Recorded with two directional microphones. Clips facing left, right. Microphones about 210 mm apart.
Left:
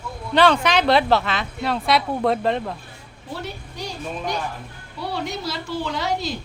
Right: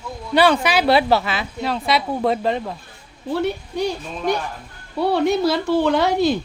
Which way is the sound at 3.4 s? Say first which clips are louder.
Right 13 dB; 60° right (ahead or behind).